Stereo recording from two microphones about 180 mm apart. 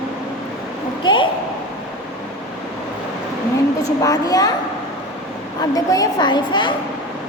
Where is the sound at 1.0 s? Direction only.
25° left (ahead or behind).